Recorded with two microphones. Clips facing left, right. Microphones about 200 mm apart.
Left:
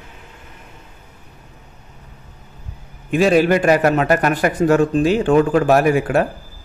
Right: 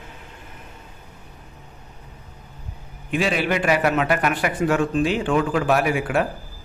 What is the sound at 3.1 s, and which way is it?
A man's voice, 45° left (ahead or behind).